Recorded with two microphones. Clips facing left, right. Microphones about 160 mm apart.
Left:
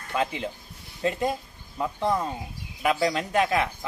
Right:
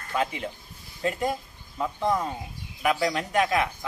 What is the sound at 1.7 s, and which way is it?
Speech, 5° left (ahead or behind).